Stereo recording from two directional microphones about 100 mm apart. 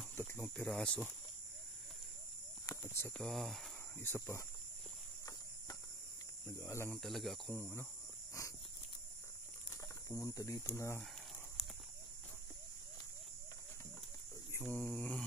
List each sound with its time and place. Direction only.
0.6 s mantra: 10° left (ahead or behind)
2.6 s cricket: 25° left (ahead or behind)
3.2 s speech: centre (ahead or behind)
4.0 s speech: 25° left (ahead or behind)
6.4 s cricket: 30° left (ahead or behind)
6.9 s speech: centre (ahead or behind)
7.5 s mantra: 15° left (ahead or behind)
8.4 s walk: 35° left (ahead or behind)
9.7 s speech: 30° left (ahead or behind)
11.6 s a sound: centre (ahead or behind)
14.6 s mantra: 15° left (ahead or behind)